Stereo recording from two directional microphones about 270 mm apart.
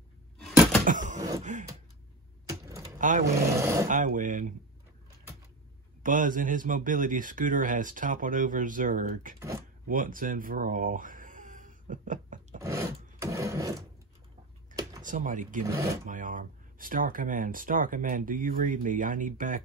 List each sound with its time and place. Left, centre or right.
0.8 s a sound: right
2.4 s typewriter: centre
3.0 s speech: right
3.3 s speech: centre
3.9 s speech: right
6.0 s speech: right
9.4 s speech: centre
9.8 s a sound: right
12.6 s rub: centre
15.0 s speech: right
15.7 s speech: centre
16.1 s speech: right